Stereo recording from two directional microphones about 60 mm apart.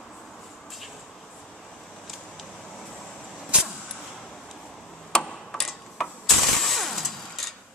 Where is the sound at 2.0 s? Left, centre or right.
Centre.